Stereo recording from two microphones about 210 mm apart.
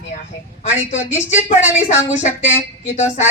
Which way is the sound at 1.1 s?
10° right (ahead or behind).